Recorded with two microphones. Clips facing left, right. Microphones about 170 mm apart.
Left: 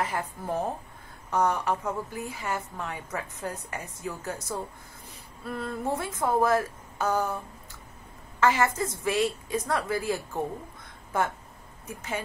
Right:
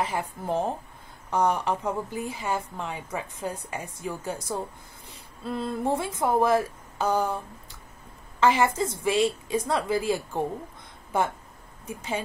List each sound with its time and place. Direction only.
0.0 s a woman's voice: 20° right (ahead or behind)
8.4 s a woman's voice: 15° right (ahead or behind)